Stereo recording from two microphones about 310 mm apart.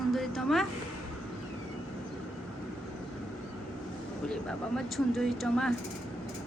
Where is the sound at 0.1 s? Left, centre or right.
Centre.